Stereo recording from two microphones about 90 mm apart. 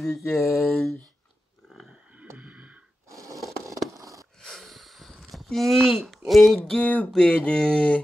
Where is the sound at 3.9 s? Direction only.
40° right (ahead or behind).